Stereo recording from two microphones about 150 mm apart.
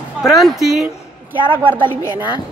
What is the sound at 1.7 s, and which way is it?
Speech, 35° right (ahead or behind).